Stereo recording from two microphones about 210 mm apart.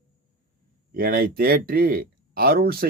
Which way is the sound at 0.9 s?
45° right (ahead or behind).